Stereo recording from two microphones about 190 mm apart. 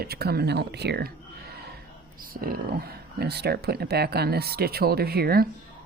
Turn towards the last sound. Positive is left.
turn(degrees=-55)  # may be behind; listen again after turning